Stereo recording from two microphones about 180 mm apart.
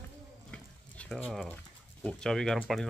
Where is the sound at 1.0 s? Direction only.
5° left (ahead or behind).